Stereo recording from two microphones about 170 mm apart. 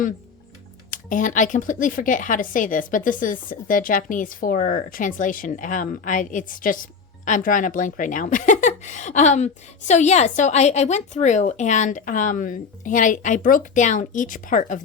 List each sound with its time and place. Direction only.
0.9 s speech: 50° left (ahead or behind)